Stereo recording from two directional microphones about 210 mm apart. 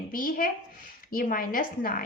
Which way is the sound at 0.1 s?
40° left (ahead or behind).